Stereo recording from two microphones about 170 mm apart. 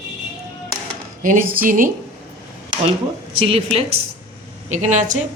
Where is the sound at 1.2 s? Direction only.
55° right (ahead or behind).